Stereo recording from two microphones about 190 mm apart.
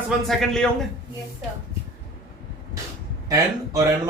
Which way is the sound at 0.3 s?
Centre (ahead or behind).